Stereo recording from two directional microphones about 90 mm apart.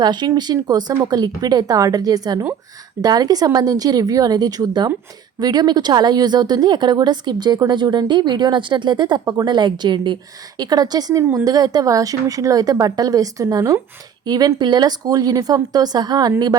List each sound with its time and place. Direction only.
0.0 s a woman's voice: 50° right (ahead or behind)
10.6 s a woman's voice: 45° right (ahead or behind)
11.2 s speech: 30° right (ahead or behind)
11.4 s a woman's voice: 45° right (ahead or behind)
14.3 s a woman's voice: 45° right (ahead or behind)